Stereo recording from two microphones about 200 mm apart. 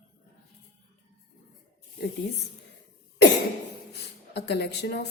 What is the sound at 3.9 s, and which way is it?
Speech, 55° left (ahead or behind).